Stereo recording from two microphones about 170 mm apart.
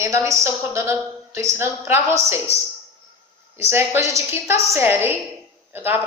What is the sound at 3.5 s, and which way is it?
A woman's voice, 15° right (ahead or behind).